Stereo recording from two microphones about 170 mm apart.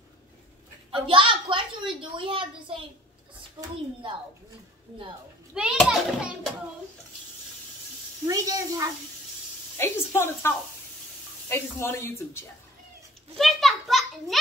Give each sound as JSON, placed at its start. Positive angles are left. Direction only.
{"t": 1.0, "sound": "a woman's voice", "side_deg": -30}
{"t": 5.5, "sound": "a child's voice", "side_deg": -5}
{"t": 8.3, "sound": "speech", "side_deg": -20}
{"t": 9.8, "sound": "speech", "side_deg": 15}
{"t": 13.4, "sound": "a child's voice", "side_deg": 0}